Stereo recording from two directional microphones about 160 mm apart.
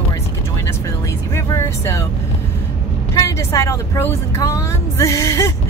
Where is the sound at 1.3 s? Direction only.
15° left (ahead or behind).